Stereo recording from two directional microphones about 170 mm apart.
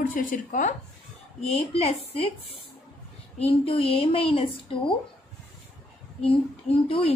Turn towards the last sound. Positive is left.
turn(degrees=35)  # may be behind; listen again after turning